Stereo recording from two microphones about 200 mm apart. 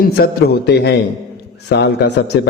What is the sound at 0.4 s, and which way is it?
A man's voice, 55° left (ahead or behind).